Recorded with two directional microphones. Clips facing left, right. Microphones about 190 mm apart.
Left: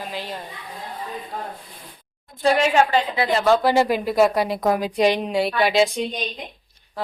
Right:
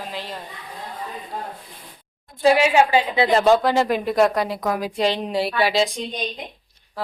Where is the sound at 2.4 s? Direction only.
5° right (ahead or behind).